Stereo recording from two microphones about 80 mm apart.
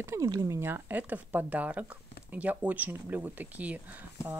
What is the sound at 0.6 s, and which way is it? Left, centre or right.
Speech, right.